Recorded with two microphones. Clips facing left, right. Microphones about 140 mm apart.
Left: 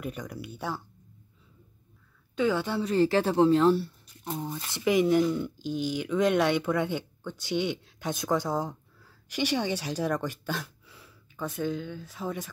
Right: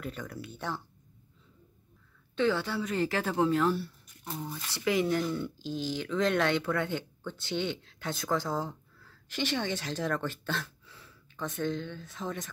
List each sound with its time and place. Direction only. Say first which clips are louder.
0.0 s speech: left 3 dB; 15° left (ahead or behind)
2.3 s speech: left 2 dB; 15° left (ahead or behind)
2.8 s speech: left 6 dB; 30° left (ahead or behind); by 12.4 s 10° left (ahead or behind)